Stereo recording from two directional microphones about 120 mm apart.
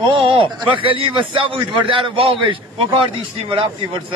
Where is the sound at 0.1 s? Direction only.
45° right (ahead or behind).